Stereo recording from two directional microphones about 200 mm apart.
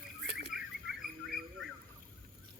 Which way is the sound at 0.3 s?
55° right (ahead or behind).